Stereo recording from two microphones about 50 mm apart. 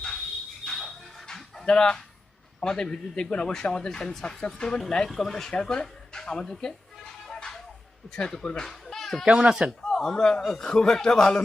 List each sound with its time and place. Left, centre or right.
0.6 s a sound: centre
2.6 s speech: centre
5.5 s music: centre
8.1 s speech: centre
9.2 s speech: centre
9.8 s speech: centre